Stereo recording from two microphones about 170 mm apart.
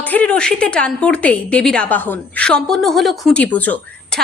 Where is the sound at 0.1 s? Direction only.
5° left (ahead or behind).